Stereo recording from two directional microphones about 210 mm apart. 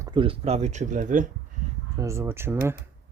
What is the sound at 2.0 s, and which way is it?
Speech, 15° right (ahead or behind).